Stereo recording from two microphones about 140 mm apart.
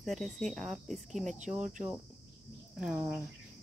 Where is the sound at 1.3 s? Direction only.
60° right (ahead or behind).